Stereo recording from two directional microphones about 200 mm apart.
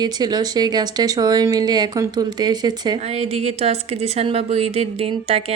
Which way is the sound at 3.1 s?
30° right (ahead or behind).